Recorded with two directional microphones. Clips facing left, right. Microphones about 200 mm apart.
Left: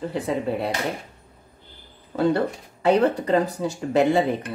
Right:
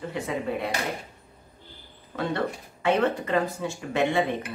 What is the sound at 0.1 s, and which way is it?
Speech, 35° left (ahead or behind).